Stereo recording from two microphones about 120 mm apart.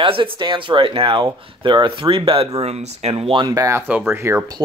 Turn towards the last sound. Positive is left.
turn(degrees=-20)  # may be behind; listen again after turning